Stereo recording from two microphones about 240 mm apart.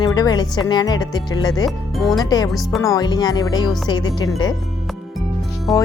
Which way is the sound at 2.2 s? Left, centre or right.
Centre.